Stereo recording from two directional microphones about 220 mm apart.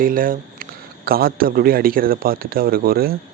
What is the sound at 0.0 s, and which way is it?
Speech, 40° right (ahead or behind).